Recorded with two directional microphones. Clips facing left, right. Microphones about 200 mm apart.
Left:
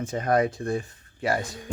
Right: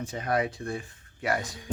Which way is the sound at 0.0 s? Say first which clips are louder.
Left 5 dB; 50° left (ahead or behind).